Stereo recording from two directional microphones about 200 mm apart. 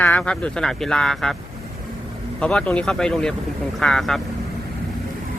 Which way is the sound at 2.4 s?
5° left (ahead or behind).